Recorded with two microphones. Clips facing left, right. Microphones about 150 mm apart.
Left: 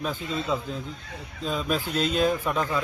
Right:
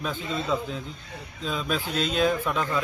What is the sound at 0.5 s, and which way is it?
A man's voice, centre (ahead or behind).